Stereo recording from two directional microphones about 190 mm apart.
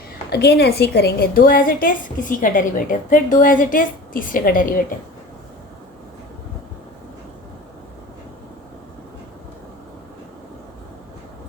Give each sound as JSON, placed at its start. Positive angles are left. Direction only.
{"t": 0.3, "sound": "a woman's voice", "side_deg": 60}